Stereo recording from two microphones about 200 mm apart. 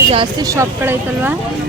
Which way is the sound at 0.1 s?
25° right (ahead or behind).